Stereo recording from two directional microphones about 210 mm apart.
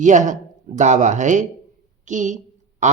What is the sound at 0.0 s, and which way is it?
Speech, 35° right (ahead or behind).